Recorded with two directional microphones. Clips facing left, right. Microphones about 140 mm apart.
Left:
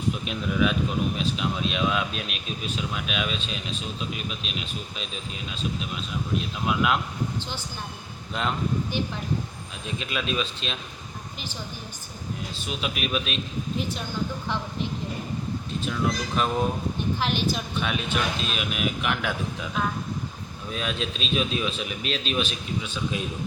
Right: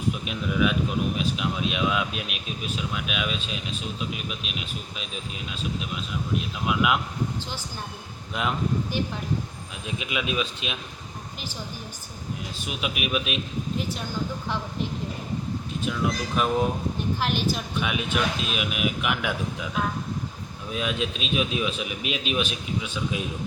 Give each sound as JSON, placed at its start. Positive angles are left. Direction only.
{"t": 0.3, "sound": "speech", "side_deg": -5}
{"t": 6.7, "sound": "speech", "side_deg": -5}
{"t": 8.3, "sound": "speech", "side_deg": -5}
{"t": 12.6, "sound": "speech", "side_deg": -10}
{"t": 16.3, "sound": "speech", "side_deg": -5}